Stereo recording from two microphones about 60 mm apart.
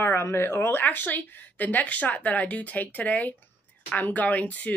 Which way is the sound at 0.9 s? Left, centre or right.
Left.